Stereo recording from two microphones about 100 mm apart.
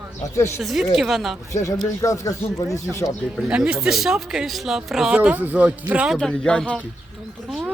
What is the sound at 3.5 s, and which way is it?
Speech, 10° right (ahead or behind).